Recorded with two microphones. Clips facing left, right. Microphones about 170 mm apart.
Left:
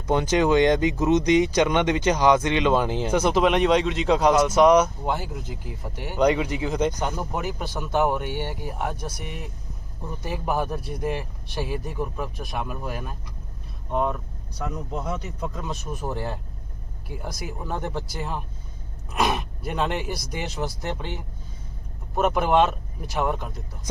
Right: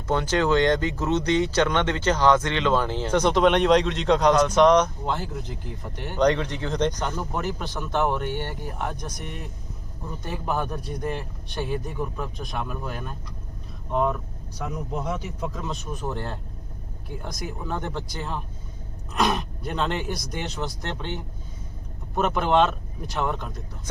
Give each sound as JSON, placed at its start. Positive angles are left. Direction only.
{"t": 0.1, "sound": "speech", "side_deg": 15}
{"t": 5.3, "sound": "speech", "side_deg": 5}